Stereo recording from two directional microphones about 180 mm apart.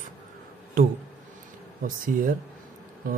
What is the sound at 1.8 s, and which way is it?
Speech, 50° right (ahead or behind).